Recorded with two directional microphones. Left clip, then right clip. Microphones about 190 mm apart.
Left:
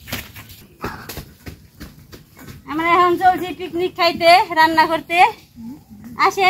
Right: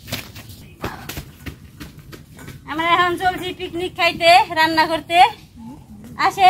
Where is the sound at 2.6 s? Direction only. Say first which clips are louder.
Left 2 dB; 65° right (ahead or behind); by 5.0 s 40° right (ahead or behind).